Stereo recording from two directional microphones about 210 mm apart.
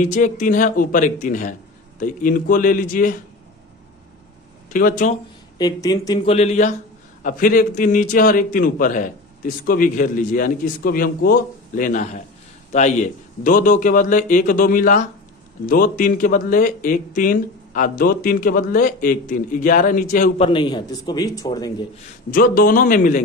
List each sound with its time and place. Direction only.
0.0 s a man's voice: 35° left (ahead or behind)
4.6 s speech: 40° left (ahead or behind)
5.6 s a man's voice: 20° left (ahead or behind); by 20.3 s 40° left (ahead or behind)
20.3 s a man's voice: 25° left (ahead or behind)
22.3 s a man's voice: 40° left (ahead or behind)